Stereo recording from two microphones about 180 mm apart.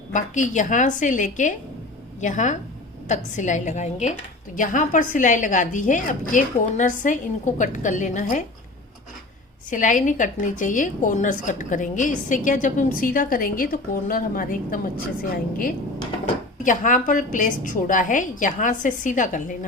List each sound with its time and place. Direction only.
0.1 s a woman's voice: 45° left (ahead or behind)
9.6 s a woman's voice: 45° left (ahead or behind)